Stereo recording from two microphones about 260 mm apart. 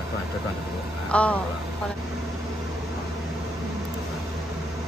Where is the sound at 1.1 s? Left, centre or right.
Centre.